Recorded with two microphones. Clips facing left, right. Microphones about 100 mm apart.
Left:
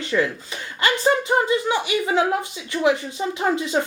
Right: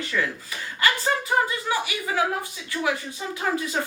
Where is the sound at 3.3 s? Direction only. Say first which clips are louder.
Left 3 dB; 25° left (ahead or behind).